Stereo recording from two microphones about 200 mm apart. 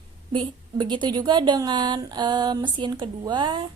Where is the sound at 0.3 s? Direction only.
25° right (ahead or behind).